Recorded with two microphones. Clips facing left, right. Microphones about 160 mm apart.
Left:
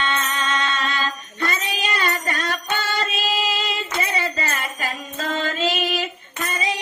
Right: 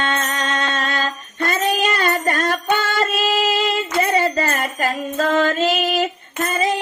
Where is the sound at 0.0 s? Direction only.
40° right (ahead or behind).